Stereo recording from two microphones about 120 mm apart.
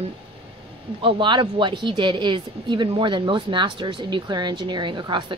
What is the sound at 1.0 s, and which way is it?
A woman's voice, 40° right (ahead or behind).